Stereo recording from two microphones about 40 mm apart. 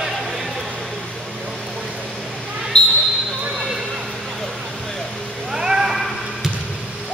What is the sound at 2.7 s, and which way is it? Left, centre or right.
Basketball bounce, centre.